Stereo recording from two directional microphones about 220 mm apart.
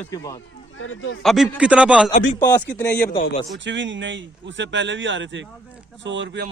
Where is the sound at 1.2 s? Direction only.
Centre (ahead or behind).